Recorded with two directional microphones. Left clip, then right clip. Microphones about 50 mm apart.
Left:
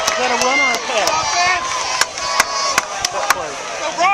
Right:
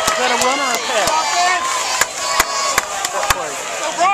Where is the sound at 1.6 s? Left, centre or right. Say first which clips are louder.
Right 1 dB; left.